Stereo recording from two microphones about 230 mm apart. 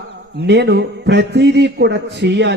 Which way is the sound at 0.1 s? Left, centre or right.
Right.